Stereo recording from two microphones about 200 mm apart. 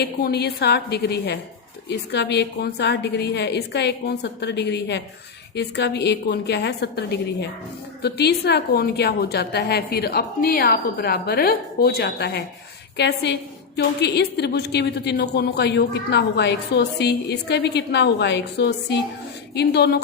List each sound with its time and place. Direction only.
0.0 s a woman's voice: 55° left (ahead or behind)